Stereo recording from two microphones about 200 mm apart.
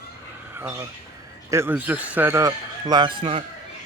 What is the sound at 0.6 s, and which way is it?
Speech, 10° right (ahead or behind).